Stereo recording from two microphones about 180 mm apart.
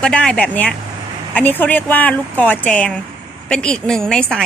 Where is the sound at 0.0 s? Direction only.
5° left (ahead or behind).